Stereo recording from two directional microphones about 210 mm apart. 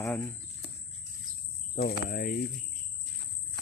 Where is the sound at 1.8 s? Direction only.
45° left (ahead or behind).